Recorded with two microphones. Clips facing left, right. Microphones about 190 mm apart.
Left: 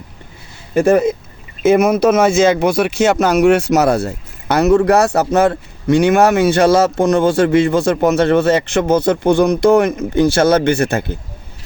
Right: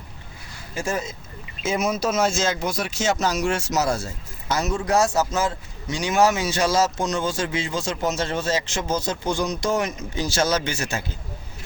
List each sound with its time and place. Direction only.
0.7 s speech: 60° left (ahead or behind)